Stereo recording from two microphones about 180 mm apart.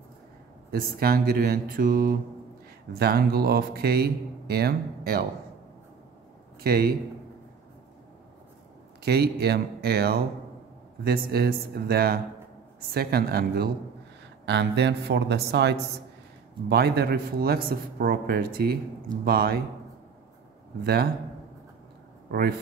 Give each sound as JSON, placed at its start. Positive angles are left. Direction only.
{"t": 0.7, "sound": "speech", "side_deg": -55}
{"t": 6.6, "sound": "speech", "side_deg": -60}
{"t": 9.0, "sound": "speech", "side_deg": -65}
{"t": 14.4, "sound": "speech", "side_deg": -75}
{"t": 20.8, "sound": "speech", "side_deg": -60}